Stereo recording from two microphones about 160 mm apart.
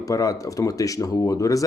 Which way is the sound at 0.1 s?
20° left (ahead or behind).